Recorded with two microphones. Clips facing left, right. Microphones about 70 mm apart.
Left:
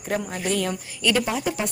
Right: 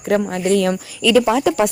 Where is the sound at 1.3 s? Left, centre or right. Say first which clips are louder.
Right 10 dB; right.